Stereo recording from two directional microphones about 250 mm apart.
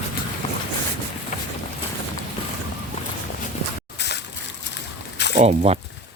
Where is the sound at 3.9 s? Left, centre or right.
Left.